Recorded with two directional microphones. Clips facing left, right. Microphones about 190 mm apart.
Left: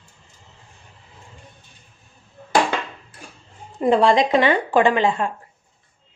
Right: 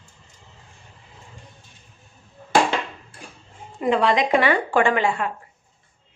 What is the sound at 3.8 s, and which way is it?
Speech, 30° left (ahead or behind).